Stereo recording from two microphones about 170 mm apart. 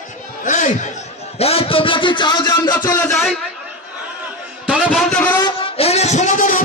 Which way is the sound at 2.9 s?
5° left (ahead or behind).